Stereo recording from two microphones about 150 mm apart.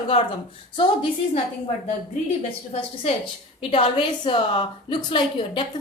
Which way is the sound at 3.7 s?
35° left (ahead or behind).